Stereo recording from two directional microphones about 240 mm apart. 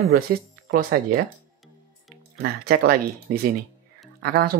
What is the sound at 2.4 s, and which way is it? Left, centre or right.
Speech, right.